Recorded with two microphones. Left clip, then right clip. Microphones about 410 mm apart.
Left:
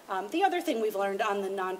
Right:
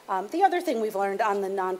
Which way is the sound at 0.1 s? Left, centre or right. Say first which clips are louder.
Right 5 dB; right.